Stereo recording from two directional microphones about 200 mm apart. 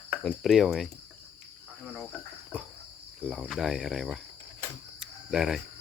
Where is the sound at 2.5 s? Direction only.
5° right (ahead or behind).